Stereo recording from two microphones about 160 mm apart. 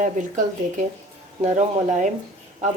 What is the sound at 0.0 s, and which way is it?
A woman's voice, 50° right (ahead or behind).